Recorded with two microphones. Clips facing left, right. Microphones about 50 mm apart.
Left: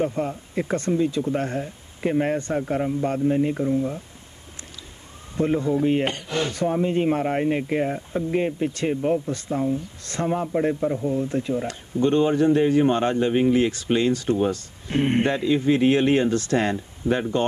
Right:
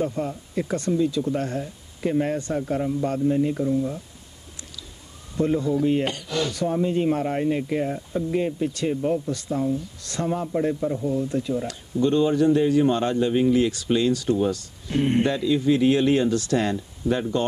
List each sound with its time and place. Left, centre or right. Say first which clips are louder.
0.0 s speech: left 2 dB; left
5.3 s speech: even; left